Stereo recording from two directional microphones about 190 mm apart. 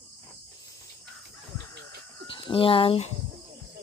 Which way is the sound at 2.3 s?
25° left (ahead or behind).